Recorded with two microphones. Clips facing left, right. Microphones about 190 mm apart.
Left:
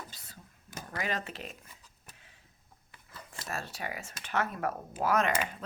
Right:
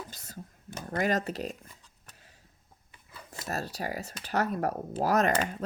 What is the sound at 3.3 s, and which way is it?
Speech, 40° right (ahead or behind).